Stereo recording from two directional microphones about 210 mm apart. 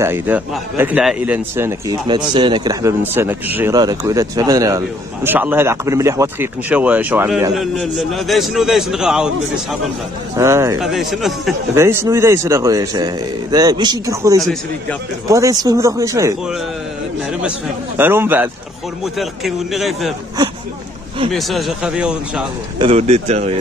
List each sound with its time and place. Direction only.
0.0 s a man's voice: 10° right (ahead or behind)
10.3 s a man's voice: 15° right (ahead or behind)
10.8 s speech: centre (ahead or behind)
11.7 s a man's voice: 10° right (ahead or behind)
14.4 s speech: centre (ahead or behind)
15.2 s a man's voice: 15° right (ahead or behind)
17.9 s a man's voice: 10° right (ahead or behind)
21.3 s speech: centre (ahead or behind)
22.8 s speech: 30° right (ahead or behind)